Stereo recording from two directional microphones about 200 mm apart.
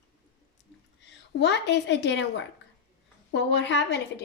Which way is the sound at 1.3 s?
60° left (ahead or behind).